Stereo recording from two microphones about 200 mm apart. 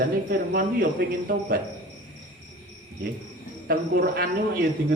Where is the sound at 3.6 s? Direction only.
45° right (ahead or behind).